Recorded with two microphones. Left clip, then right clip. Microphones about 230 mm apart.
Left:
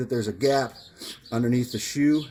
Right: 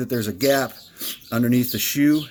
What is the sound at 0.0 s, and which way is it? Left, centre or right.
Speech, right.